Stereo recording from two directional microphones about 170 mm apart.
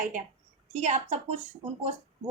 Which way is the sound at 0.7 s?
45° right (ahead or behind).